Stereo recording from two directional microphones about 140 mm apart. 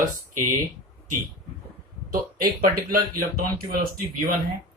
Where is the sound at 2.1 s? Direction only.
90° right.